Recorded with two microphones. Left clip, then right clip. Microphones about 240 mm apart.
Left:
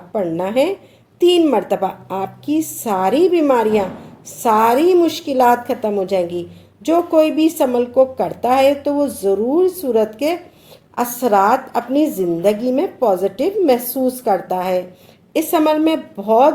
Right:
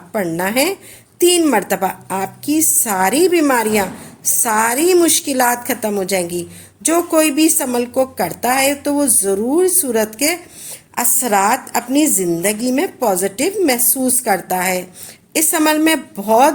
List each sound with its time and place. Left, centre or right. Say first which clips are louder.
0.1 s a woman's voice: even; right